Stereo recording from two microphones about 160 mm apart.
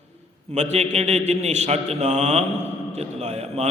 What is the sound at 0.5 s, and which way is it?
Mantra, 45° right (ahead or behind).